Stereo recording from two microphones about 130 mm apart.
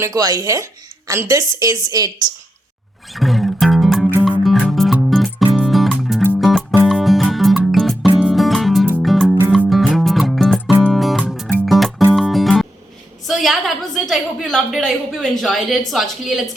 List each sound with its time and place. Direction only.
0.0 s a woman's voice: 25° right (ahead or behind)
3.1 s music: centre (ahead or behind)
13.2 s a woman's voice: centre (ahead or behind)